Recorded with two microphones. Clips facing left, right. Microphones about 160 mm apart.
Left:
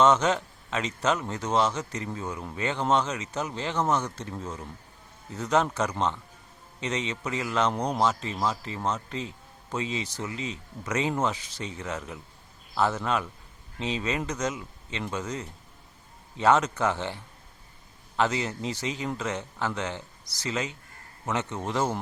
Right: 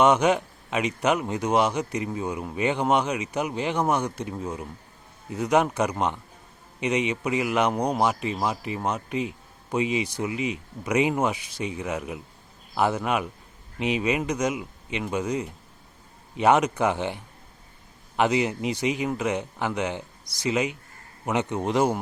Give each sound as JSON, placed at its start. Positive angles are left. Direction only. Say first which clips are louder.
{"t": 0.0, "sound": "a man's voice", "louder": "right 2 dB", "side_deg": -15}